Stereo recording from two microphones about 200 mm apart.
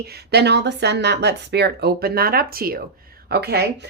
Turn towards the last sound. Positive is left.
turn(degrees=-55)  # may be behind; listen again after turning